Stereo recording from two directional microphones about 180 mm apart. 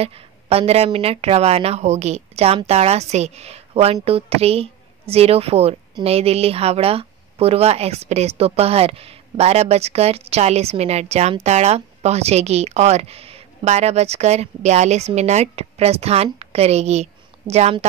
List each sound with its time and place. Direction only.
0.0 s a woman's voice: 35° right (ahead or behind)